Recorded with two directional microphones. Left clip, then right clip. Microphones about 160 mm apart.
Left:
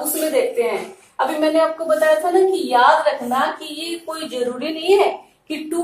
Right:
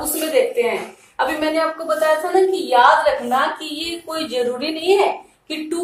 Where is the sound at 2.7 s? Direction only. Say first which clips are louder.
Right 2 dB; 20° right (ahead or behind).